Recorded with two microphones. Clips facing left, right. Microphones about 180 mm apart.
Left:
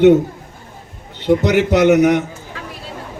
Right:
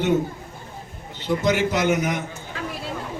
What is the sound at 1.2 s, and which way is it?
A man's voice, 65° left (ahead or behind).